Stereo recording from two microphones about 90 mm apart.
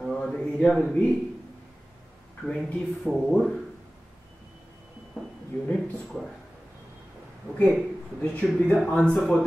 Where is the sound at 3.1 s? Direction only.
Centre (ahead or behind).